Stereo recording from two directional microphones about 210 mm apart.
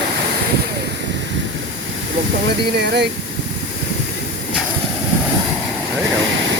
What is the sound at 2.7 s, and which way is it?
Speech, 50° right (ahead or behind).